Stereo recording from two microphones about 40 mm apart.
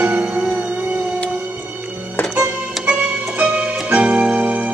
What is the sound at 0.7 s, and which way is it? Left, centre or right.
Music, right.